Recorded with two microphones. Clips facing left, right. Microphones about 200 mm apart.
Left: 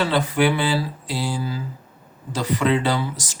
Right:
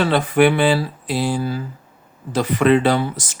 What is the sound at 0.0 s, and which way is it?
Speech, 60° right (ahead or behind).